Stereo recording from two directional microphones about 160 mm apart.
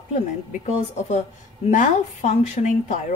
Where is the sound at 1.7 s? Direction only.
50° left (ahead or behind).